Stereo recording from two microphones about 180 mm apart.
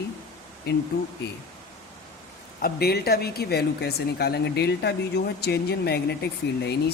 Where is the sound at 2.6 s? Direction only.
60° left (ahead or behind).